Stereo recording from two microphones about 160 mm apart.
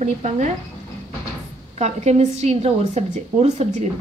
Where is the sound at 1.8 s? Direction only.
45° right (ahead or behind).